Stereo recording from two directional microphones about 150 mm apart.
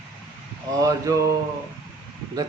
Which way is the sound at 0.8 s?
20° right (ahead or behind).